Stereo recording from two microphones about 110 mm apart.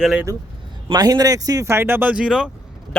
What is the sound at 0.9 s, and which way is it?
Speech, 35° right (ahead or behind).